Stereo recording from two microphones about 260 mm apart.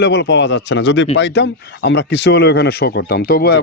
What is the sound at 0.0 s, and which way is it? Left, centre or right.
Speech, left.